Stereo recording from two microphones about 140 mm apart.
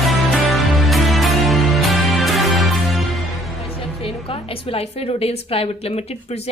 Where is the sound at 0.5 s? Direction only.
Centre (ahead or behind).